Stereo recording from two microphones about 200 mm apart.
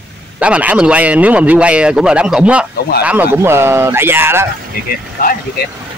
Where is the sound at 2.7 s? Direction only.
55° left (ahead or behind).